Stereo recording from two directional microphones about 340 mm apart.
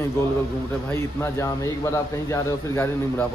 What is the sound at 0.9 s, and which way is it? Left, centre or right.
A man's voice, centre.